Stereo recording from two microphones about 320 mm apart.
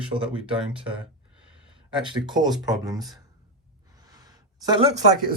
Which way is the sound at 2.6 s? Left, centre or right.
Centre.